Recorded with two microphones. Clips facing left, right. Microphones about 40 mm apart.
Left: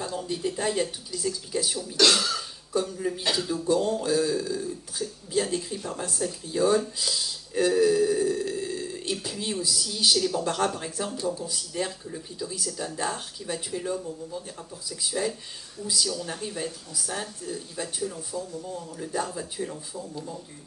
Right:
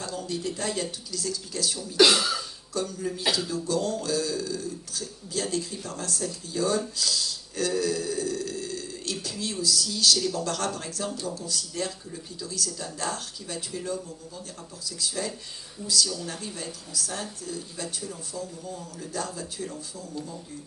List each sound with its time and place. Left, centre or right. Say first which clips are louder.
0.0 s speech: left 2 dB; centre
2.0 s cough: right 2 dB; centre
2.7 s speech: left 3 dB; centre
7.0 s burping: right 1 dB; centre
10.3 s speech: left 3 dB; centre